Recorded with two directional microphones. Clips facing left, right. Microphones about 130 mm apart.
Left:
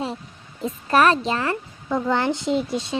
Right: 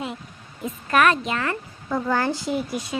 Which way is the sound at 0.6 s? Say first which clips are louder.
Left 2 dB; 30° left (ahead or behind).